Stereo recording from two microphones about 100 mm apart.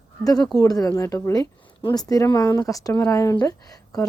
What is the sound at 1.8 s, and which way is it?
Speech, 40° left (ahead or behind).